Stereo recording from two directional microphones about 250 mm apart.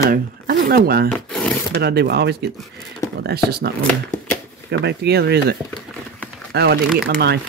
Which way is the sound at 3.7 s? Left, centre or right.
Centre.